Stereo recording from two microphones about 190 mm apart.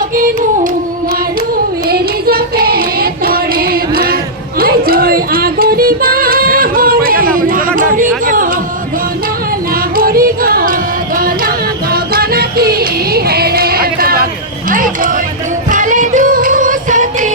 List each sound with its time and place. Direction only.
1.9 s child singing: 55° right (ahead or behind)
4.6 s music: 50° right (ahead or behind)
9.9 s music: 50° right (ahead or behind)
14.7 s a sound: 45° right (ahead or behind)
15.7 s music: 40° right (ahead or behind)